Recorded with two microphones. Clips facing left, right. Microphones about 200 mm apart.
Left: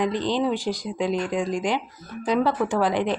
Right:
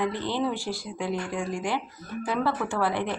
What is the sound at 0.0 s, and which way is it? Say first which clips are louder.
A woman's voice: left 4 dB; 15° left (ahead or behind).